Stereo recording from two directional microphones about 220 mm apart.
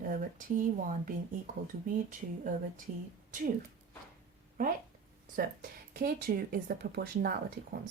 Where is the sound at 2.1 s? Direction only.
35° right (ahead or behind).